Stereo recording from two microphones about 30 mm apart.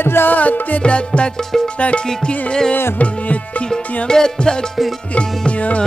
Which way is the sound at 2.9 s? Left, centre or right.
Left.